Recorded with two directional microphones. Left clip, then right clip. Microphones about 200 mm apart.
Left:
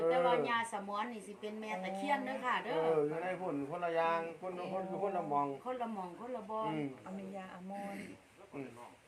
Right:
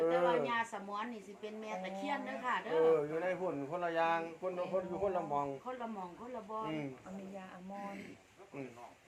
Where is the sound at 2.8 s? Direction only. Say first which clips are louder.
Right 4 dB; 40° right (ahead or behind).